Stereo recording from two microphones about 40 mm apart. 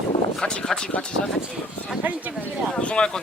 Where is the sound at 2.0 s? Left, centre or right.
Right.